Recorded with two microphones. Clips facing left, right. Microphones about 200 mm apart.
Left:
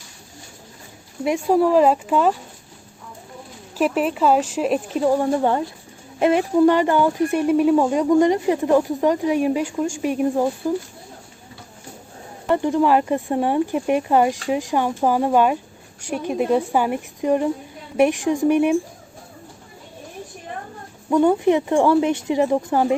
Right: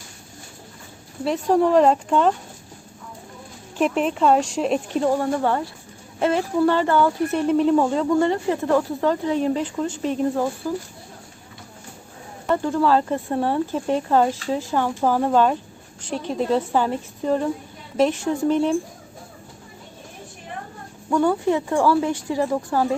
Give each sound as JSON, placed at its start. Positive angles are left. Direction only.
{"t": 1.2, "sound": "speech", "side_deg": 10}
{"t": 3.8, "sound": "speech", "side_deg": 5}
{"t": 12.5, "sound": "speech", "side_deg": 20}
{"t": 21.1, "sound": "speech", "side_deg": 20}